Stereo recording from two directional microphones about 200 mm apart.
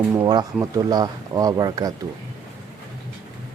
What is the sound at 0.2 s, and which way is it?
Speech, 20° right (ahead or behind).